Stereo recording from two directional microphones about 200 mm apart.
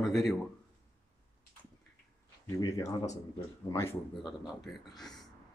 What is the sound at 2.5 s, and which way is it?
Speech, 15° left (ahead or behind).